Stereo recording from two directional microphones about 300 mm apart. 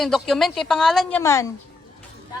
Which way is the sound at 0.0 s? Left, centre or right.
Centre.